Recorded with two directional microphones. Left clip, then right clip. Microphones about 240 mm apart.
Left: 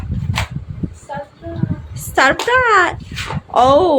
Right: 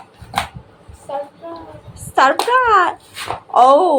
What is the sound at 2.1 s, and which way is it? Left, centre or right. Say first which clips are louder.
Speech: even; left.